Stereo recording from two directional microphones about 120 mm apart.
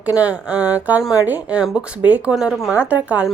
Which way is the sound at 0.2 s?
10° right (ahead or behind).